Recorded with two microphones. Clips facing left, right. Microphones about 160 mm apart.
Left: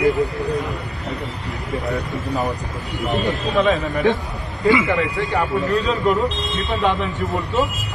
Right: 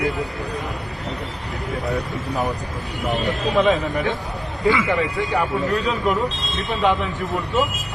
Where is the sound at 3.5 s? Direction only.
20° right (ahead or behind).